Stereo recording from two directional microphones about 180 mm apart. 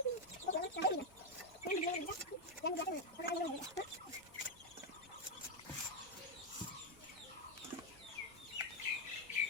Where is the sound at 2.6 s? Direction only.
65° left (ahead or behind).